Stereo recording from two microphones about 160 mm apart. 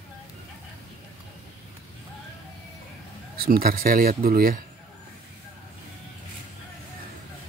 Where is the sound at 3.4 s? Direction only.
65° right (ahead or behind).